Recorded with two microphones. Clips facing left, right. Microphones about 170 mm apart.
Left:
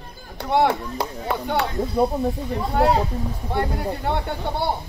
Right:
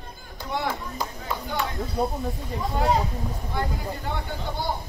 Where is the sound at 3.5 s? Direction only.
70° left (ahead or behind).